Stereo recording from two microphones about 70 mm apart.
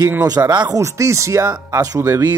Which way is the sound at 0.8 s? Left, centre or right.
Right.